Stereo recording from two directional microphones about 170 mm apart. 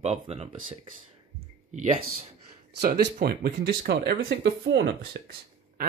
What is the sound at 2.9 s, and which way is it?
Speech, 65° right (ahead or behind).